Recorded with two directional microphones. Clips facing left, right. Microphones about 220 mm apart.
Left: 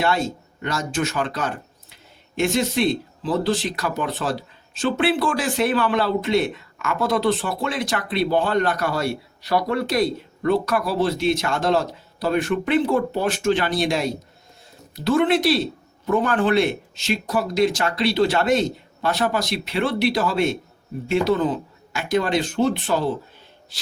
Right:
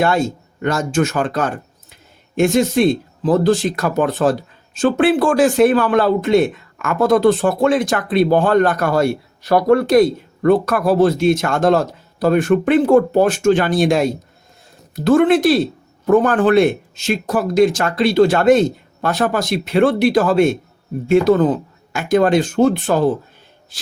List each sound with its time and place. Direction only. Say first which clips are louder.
0.0 s speech: right 5 dB; 50° right (ahead or behind)